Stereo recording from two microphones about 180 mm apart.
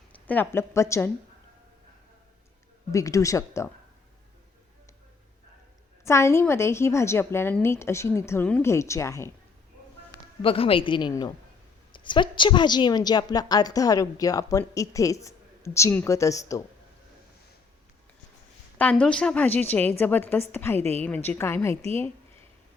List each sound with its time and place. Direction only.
0.1 s speech: 10° left (ahead or behind)
2.9 s a woman's voice: 15° left (ahead or behind)
6.1 s a woman's voice: 15° left (ahead or behind)
10.4 s a woman's voice: 30° left (ahead or behind)
18.8 s a woman's voice: 10° left (ahead or behind)